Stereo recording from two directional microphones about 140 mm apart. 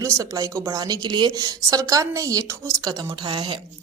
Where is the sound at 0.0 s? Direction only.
25° right (ahead or behind).